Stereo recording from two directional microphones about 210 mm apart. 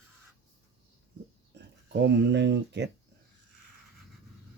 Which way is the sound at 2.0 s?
55° right (ahead or behind).